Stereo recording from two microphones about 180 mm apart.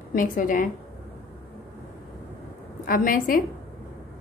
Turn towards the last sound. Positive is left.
turn(degrees=50)  # may be behind; listen again after turning